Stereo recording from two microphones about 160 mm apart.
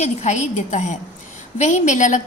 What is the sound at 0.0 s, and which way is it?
A woman's voice, 45° left (ahead or behind).